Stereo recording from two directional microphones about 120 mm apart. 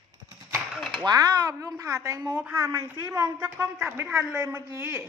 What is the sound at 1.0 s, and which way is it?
Speech, 30° right (ahead or behind).